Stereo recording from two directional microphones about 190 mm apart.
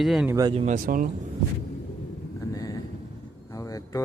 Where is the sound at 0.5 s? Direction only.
35° right (ahead or behind).